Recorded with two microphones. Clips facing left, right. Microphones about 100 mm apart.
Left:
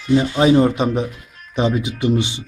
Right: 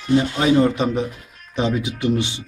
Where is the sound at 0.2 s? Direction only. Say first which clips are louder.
Left 3 dB; 15° left (ahead or behind).